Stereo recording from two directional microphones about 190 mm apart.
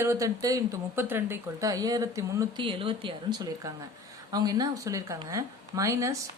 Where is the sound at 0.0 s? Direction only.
15° right (ahead or behind).